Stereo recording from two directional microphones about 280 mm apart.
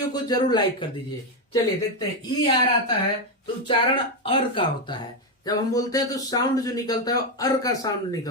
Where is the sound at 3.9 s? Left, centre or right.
Centre.